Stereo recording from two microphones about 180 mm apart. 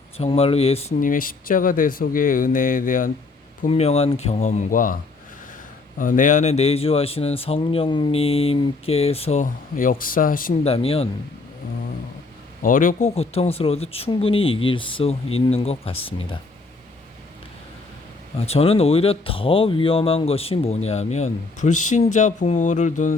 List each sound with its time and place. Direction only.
0.2 s speech: 35° left (ahead or behind)
0.9 s speech: 50° left (ahead or behind)
3.7 s speech: 35° left (ahead or behind)
6.0 s speech: 45° left (ahead or behind)
10.6 s speech: 35° left (ahead or behind)
12.6 s speech: 50° left (ahead or behind)
13.1 s speech: 35° left (ahead or behind)
18.3 s speech: 35° left (ahead or behind)